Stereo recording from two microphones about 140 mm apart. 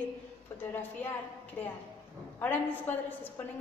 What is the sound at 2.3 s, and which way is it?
A woman's voice, 15° left (ahead or behind).